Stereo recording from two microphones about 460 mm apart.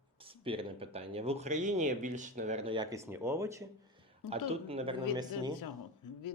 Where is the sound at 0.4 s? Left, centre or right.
Centre.